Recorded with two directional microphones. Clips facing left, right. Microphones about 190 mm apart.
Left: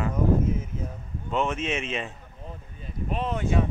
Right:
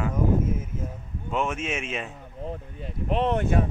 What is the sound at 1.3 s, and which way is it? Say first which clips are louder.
Speech: left 1 dB; 5° right (ahead or behind).